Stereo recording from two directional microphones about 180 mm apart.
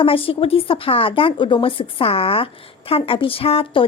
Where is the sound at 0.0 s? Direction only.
30° left (ahead or behind).